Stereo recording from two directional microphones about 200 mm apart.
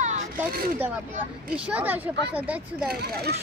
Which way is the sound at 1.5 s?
5° right (ahead or behind).